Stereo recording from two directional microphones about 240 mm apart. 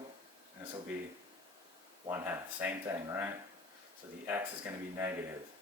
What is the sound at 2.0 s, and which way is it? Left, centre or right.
Speech, centre.